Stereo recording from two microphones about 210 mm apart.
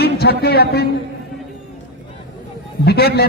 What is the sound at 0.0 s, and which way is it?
Speech, 50° left (ahead or behind).